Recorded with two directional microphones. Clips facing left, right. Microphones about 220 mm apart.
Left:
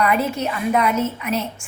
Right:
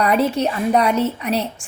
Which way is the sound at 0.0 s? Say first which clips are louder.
Right 3 dB; 35° right (ahead or behind).